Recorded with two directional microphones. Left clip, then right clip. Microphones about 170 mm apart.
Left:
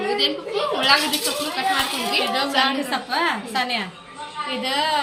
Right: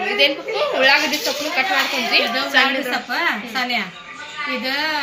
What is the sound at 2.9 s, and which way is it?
A woman's voice, 25° left (ahead or behind).